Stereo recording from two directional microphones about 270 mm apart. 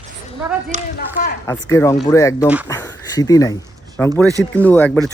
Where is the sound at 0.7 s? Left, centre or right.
Right.